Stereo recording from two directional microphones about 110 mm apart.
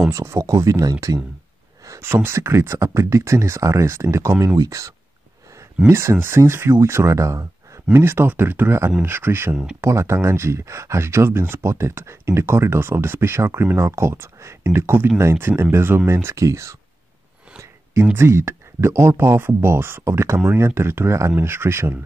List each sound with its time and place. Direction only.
0.1 s speech: 25° right (ahead or behind)
18.1 s speech: 25° right (ahead or behind)